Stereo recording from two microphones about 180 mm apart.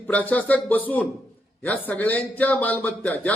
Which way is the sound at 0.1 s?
10° left (ahead or behind).